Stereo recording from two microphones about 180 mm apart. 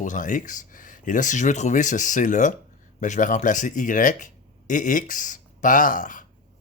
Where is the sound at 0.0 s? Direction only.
45° left (ahead or behind).